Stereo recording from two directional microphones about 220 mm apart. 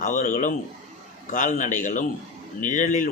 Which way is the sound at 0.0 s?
35° left (ahead or behind).